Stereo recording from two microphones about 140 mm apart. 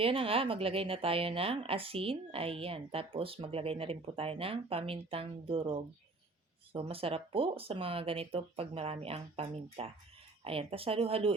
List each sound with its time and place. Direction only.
0.0 s speech: 40° right (ahead or behind)